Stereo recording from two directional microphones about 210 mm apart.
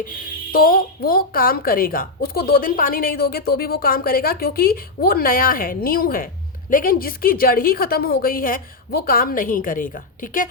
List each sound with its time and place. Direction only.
0.5 s a woman's voice: 45° left (ahead or behind)